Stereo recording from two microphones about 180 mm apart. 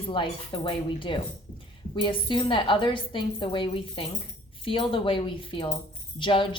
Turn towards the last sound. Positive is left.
turn(degrees=25)  # may be behind; listen again after turning